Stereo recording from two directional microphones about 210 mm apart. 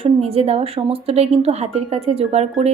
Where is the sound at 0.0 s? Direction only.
25° right (ahead or behind).